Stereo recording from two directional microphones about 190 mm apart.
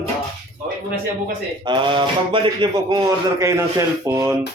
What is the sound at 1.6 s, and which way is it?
Speech, 25° right (ahead or behind).